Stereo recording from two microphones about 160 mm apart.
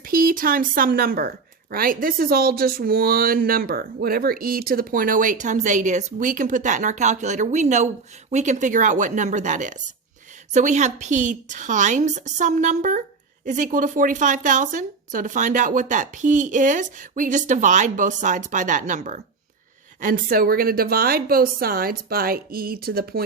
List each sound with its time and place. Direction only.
0.0 s speech: 60° right (ahead or behind)